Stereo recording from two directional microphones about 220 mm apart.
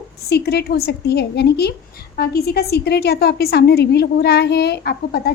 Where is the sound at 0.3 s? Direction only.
45° left (ahead or behind).